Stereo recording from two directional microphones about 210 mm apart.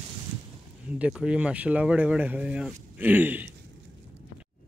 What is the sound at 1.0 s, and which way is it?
Speech, 5° right (ahead or behind).